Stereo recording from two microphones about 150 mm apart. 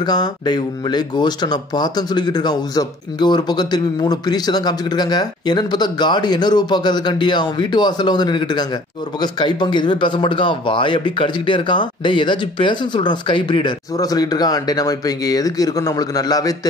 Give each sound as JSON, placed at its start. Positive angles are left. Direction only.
{"t": 0.0, "sound": "speech", "side_deg": 25}